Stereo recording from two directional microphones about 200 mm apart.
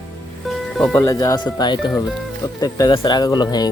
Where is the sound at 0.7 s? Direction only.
Centre (ahead or behind).